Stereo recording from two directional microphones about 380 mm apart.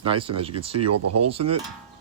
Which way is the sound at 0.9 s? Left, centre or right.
Right.